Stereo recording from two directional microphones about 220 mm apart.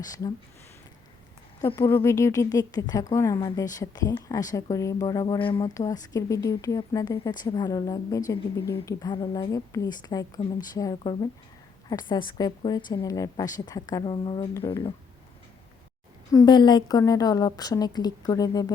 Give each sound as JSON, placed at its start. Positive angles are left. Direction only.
{"t": 0.0, "sound": "speech", "side_deg": 15}
{"t": 2.0, "sound": "speech", "side_deg": 15}
{"t": 16.3, "sound": "speech", "side_deg": 20}